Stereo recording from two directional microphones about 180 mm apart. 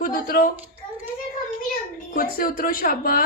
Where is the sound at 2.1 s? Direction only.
50° left (ahead or behind).